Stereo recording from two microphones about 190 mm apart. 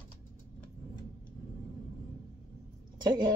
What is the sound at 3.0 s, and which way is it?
Speech, 20° right (ahead or behind).